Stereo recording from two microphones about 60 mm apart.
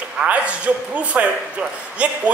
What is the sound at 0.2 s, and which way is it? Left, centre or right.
A man's voice, right.